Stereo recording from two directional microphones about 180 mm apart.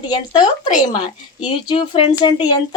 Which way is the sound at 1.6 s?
30° left (ahead or behind).